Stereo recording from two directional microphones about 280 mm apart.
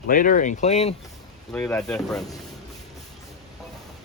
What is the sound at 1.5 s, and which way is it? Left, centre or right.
Speech, centre.